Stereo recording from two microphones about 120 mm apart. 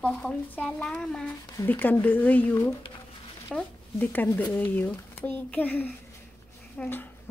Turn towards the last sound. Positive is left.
turn(degrees=15)  # may be behind; listen again after turning